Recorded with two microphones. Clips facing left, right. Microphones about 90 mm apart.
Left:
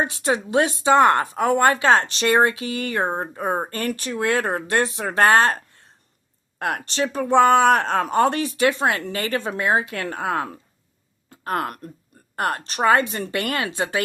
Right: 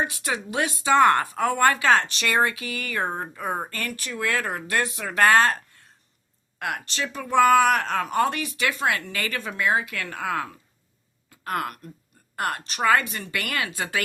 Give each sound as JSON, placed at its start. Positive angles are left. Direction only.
{"t": 0.0, "sound": "a woman's voice", "side_deg": 30}